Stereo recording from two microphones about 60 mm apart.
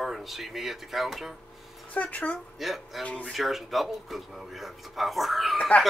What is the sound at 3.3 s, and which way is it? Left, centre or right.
Speech, centre.